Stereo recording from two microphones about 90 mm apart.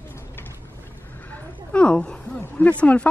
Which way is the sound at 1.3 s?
10° left (ahead or behind).